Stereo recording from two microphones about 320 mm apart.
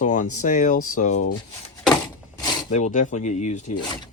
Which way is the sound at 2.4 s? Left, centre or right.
Left.